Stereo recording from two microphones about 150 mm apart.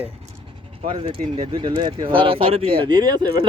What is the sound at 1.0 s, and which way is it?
Speech, 35° right (ahead or behind).